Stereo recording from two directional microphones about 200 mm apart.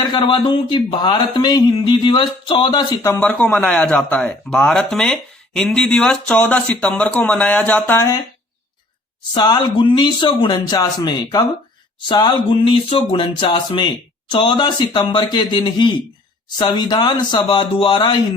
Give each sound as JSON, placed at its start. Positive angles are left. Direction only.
{"t": 0.1, "sound": "speech", "side_deg": 25}
{"t": 9.3, "sound": "speech", "side_deg": 20}